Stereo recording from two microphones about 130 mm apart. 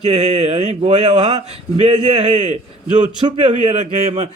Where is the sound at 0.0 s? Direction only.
55° right (ahead or behind).